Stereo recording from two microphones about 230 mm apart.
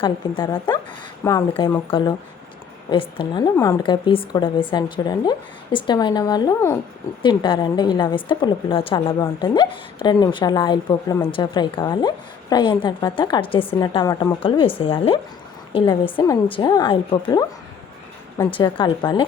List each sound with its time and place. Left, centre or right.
0.0 s a woman's voice: centre
18.5 s a woman's voice: left